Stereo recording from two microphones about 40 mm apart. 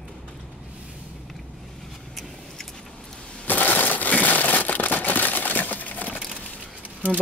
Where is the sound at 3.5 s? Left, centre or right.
Left.